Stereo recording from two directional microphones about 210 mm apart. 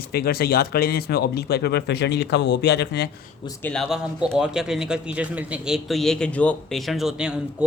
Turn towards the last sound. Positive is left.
turn(degrees=-5)  # may be behind; listen again after turning